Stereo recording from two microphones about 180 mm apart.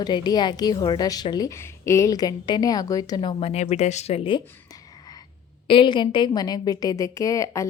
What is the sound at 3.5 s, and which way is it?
Speech, 35° left (ahead or behind).